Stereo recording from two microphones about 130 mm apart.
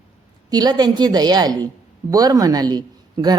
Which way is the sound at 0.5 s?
30° right (ahead or behind).